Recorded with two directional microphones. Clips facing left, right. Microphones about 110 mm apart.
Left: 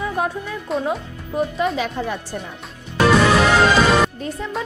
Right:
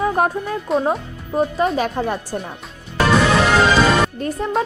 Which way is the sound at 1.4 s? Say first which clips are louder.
Right 3 dB; 35° right (ahead or behind).